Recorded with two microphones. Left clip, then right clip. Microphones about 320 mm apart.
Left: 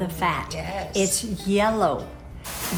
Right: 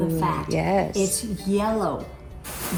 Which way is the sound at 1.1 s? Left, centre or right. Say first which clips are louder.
Left 2 dB; centre.